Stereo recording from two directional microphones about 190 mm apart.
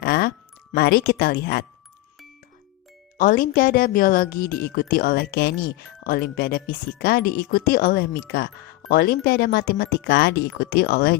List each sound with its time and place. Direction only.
0.0 s music: 55° left (ahead or behind)
3.2 s speech: 45° left (ahead or behind)